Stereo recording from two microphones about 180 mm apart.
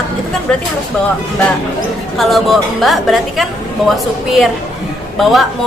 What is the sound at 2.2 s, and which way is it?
A woman's voice, centre (ahead or behind).